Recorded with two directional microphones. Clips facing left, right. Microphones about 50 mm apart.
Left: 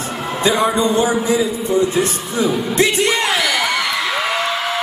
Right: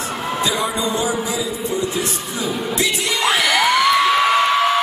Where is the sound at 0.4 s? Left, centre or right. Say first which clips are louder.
Left 7 dB; left.